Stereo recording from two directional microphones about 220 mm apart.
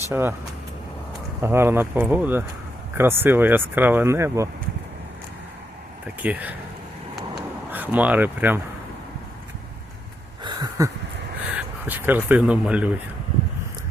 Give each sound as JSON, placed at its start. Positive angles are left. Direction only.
{"t": 0.1, "sound": "speech", "side_deg": -10}
{"t": 1.4, "sound": "speech", "side_deg": -10}
{"t": 6.2, "sound": "speech", "side_deg": -5}
{"t": 7.7, "sound": "speech", "side_deg": -10}
{"t": 10.4, "sound": "a sound", "side_deg": -15}
{"t": 11.9, "sound": "speech", "side_deg": -10}